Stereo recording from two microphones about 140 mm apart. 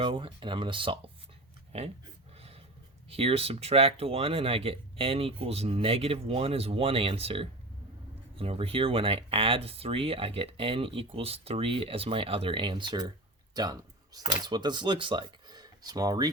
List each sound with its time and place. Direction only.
0.0 s speech: 40° right (ahead or behind)
3.1 s speech: 45° right (ahead or behind); by 16.3 s 25° right (ahead or behind)